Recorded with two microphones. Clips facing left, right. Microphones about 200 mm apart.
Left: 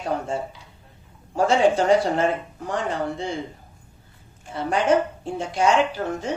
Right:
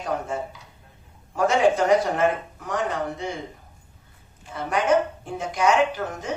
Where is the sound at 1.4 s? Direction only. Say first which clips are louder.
Left 1 dB; 30° left (ahead or behind).